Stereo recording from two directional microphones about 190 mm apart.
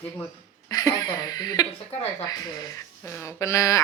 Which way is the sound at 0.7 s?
20° left (ahead or behind).